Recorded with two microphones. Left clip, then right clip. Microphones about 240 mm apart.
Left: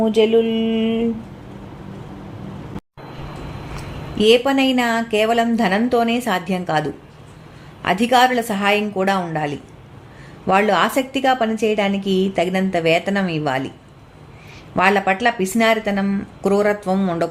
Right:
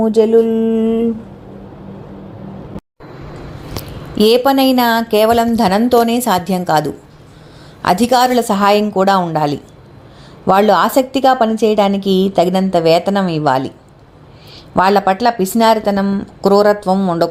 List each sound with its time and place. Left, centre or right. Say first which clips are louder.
0.0 s a woman's voice: right 4 dB; centre
4.3 s a woman's voice: right 3 dB; centre
14.8 s a woman's voice: right 4 dB; centre